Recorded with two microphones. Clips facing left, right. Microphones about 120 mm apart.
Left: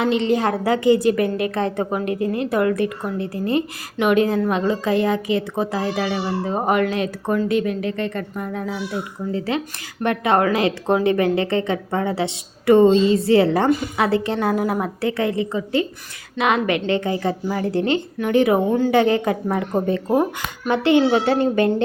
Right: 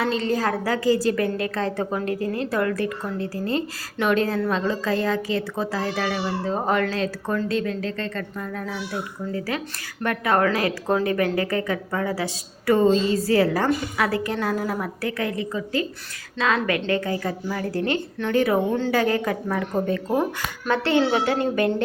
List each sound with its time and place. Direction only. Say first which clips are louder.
0.0 s a woman's voice: left 4 dB; 20° left (ahead or behind)